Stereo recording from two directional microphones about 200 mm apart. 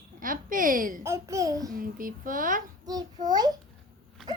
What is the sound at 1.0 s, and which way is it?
Speech, 15° right (ahead or behind).